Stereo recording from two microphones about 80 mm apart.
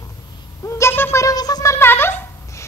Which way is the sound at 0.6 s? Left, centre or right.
Left.